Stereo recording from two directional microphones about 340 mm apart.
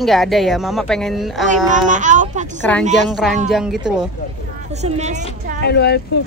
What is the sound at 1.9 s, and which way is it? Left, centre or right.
A woman's voice, right.